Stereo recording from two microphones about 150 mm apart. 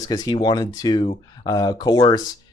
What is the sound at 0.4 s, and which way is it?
Speech, 30° left (ahead or behind).